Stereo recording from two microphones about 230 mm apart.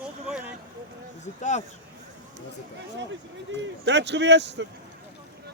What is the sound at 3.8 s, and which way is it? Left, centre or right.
Speech, right.